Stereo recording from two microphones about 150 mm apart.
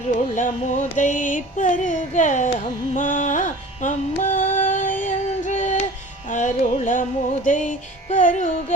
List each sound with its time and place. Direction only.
0.2 s music: 55° left (ahead or behind)